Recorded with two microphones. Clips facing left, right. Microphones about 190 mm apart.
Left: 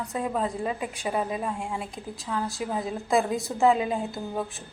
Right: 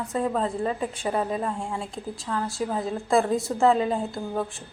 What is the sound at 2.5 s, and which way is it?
Speech, centre (ahead or behind).